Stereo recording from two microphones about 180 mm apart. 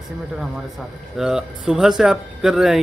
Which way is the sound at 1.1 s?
5° right (ahead or behind).